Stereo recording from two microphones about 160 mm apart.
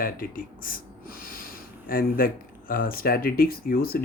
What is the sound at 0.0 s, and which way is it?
Speech, 60° left (ahead or behind).